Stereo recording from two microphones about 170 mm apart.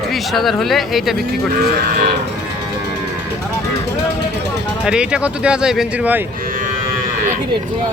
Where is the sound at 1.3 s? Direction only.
65° right (ahead or behind).